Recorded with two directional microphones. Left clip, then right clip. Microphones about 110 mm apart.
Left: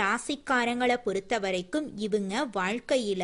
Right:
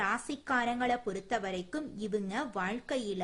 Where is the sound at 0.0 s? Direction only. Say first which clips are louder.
Left 5 dB; 35° left (ahead or behind).